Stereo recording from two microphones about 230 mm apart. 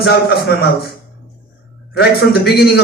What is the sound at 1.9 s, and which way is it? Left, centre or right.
Speech, left.